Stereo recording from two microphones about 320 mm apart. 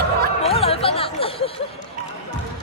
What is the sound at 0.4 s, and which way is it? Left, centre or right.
Music, centre.